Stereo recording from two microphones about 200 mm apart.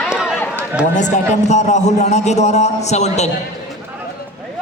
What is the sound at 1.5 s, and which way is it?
A man's voice, 35° left (ahead or behind).